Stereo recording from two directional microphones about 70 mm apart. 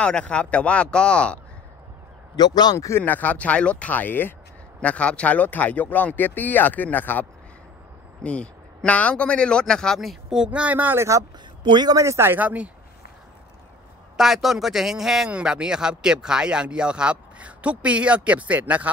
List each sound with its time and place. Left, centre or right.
0.0 s speech: centre
2.3 s a man's voice: left
3.0 s speech: left
4.8 s speech: centre
10.3 s speech: centre
11.0 s speech: right
11.6 s a man's voice: right
12.0 s speech: right
12.3 s speech: right
14.1 s speech: centre; by 18.9 s right